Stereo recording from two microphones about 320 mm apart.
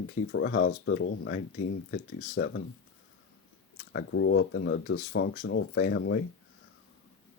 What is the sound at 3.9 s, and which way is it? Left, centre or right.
Speech, left.